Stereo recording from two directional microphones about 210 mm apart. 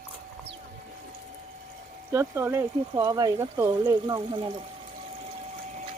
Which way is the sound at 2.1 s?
10° right (ahead or behind).